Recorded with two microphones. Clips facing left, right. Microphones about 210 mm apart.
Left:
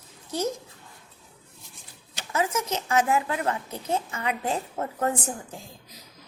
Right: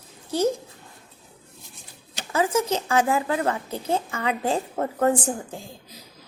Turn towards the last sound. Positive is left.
turn(degrees=-30)  # may be behind; listen again after turning